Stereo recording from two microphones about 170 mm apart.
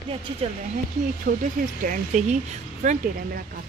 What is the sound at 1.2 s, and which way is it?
Speech, 55° right (ahead or behind).